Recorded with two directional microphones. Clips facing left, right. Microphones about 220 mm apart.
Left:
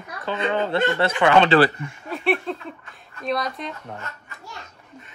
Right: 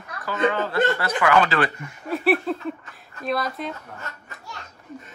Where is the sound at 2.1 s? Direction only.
Centre (ahead or behind).